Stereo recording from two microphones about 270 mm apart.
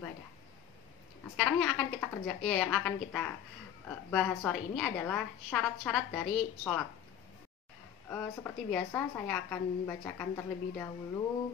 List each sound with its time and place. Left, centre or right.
1.3 s a woman's voice: centre
8.1 s a woman's voice: centre